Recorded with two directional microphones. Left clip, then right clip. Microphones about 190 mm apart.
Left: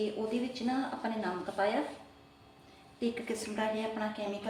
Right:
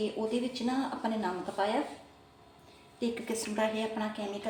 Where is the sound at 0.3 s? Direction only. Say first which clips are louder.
Right 2 dB; 20° right (ahead or behind).